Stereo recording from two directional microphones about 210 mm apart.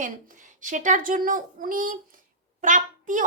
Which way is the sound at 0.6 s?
35° right (ahead or behind).